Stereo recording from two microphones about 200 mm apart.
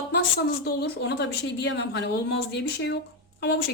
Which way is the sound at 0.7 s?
55° left (ahead or behind).